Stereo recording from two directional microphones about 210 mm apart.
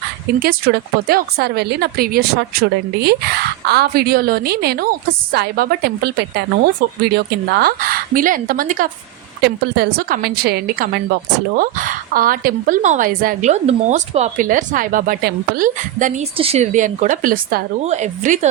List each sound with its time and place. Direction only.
0.3 s speech: 50° right (ahead or behind)
7.5 s speech: 45° right (ahead or behind)
9.4 s a woman's voice: 50° right (ahead or behind); by 18.3 s 35° right (ahead or behind)